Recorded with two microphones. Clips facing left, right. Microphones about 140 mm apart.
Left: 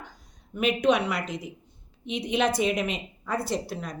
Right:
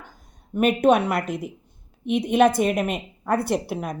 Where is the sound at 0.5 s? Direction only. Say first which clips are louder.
Right 5 dB; 50° right (ahead or behind).